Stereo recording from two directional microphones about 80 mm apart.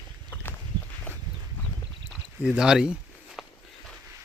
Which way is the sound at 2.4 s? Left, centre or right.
Centre.